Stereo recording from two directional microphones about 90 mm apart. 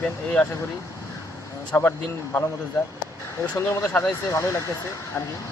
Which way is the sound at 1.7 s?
30° left (ahead or behind).